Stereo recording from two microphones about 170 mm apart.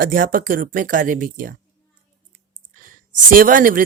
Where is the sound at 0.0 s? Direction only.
55° right (ahead or behind).